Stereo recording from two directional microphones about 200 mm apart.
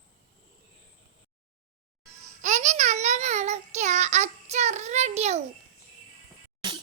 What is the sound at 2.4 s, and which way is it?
Child singing, 35° right (ahead or behind).